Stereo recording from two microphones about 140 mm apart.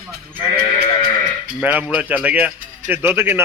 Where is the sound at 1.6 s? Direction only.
10° right (ahead or behind).